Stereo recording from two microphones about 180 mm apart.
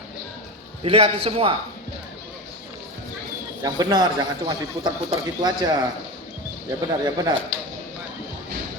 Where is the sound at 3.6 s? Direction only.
20° right (ahead or behind).